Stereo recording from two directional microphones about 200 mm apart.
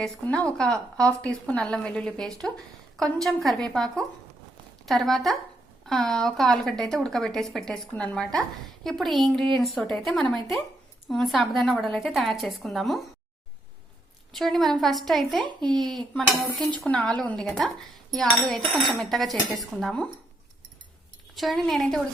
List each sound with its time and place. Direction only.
0.0 s a woman's voice: 5° left (ahead or behind)
4.9 s a woman's voice: centre (ahead or behind)
14.3 s a woman's voice: centre (ahead or behind)
15.4 s speech: 20° right (ahead or behind)
16.1 s a woman's voice: centre (ahead or behind)
21.3 s a woman's voice: centre (ahead or behind)